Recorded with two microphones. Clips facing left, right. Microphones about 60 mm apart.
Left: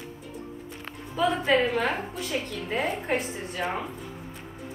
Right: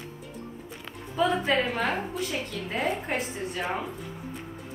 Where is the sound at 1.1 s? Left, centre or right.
Centre.